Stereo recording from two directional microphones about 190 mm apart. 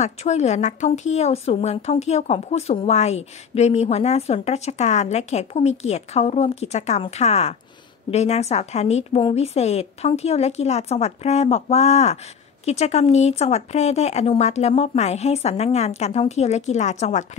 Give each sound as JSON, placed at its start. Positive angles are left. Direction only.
{"t": 0.0, "sound": "speech", "side_deg": 35}